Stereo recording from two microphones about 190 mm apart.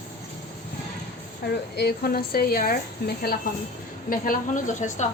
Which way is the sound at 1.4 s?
55° left (ahead or behind).